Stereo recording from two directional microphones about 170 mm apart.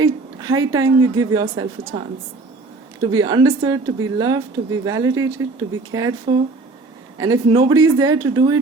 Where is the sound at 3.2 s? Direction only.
25° right (ahead or behind).